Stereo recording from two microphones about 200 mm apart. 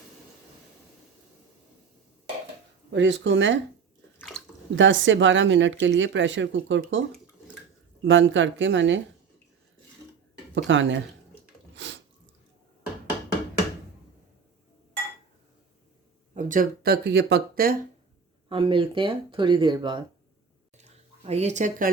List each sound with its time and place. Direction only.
2.9 s speech: 65° right (ahead or behind)
4.2 s a sound: centre (ahead or behind)
4.7 s speech: 70° right (ahead or behind)
8.0 s speech: 70° right (ahead or behind)
10.5 s speech: 70° right (ahead or behind)
11.7 s a sound: 65° right (ahead or behind)
16.3 s speech: 40° right (ahead or behind)
18.4 s speech: 25° right (ahead or behind)
20.7 s a sound: 35° right (ahead or behind)